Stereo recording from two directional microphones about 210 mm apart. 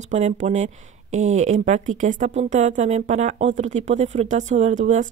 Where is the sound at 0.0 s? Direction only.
35° right (ahead or behind).